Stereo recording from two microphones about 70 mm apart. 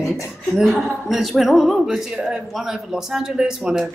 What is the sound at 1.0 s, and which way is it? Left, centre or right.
A woman's voice, centre.